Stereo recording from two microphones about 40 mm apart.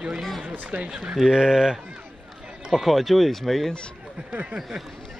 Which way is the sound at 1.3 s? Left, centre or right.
Centre.